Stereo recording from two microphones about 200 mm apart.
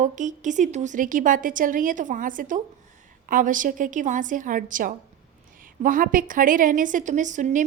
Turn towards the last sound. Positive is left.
turn(degrees=-40)  # may be behind; listen again after turning